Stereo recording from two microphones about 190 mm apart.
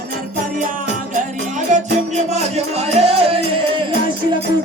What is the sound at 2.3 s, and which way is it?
Music, 35° right (ahead or behind).